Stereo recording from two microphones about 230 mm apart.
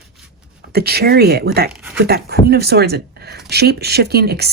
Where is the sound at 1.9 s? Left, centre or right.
Right.